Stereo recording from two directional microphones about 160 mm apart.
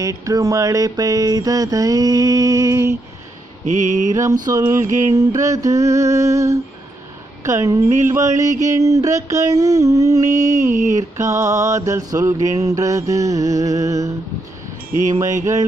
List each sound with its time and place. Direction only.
0.0 s mantra: 20° right (ahead or behind)
3.6 s mantra: 50° right (ahead or behind)
4.1 s mantra: 20° right (ahead or behind)